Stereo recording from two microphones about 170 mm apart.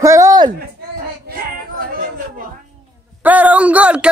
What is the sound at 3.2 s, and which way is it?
Speech, 10° right (ahead or behind).